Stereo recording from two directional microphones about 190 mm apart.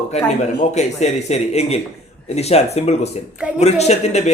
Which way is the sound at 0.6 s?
35° left (ahead or behind).